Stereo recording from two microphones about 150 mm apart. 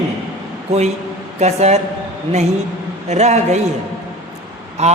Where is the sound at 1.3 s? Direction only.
45° right (ahead or behind).